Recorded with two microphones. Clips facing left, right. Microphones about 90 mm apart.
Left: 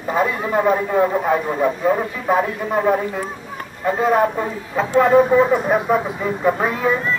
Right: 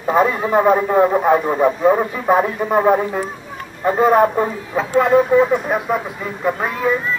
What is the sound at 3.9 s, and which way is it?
A man's voice, 5° right (ahead or behind).